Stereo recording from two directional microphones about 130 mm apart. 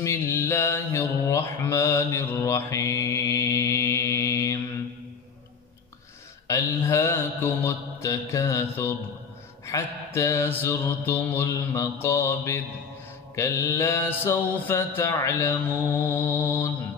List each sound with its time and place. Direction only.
0.0 s mantra: 20° left (ahead or behind)
6.4 s mantra: 25° left (ahead or behind)